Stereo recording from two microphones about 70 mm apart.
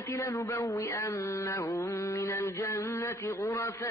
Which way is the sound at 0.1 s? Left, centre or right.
Left.